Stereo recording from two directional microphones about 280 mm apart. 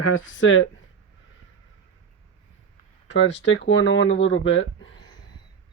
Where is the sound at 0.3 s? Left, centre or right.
Left.